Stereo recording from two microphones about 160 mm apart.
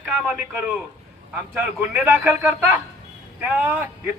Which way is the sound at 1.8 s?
10° right (ahead or behind).